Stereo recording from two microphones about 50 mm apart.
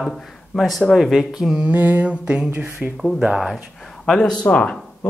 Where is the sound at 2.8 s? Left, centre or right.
Centre.